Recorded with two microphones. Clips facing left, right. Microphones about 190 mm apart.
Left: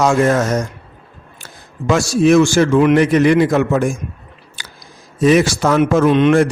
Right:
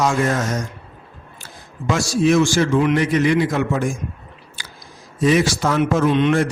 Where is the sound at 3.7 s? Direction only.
75° left (ahead or behind).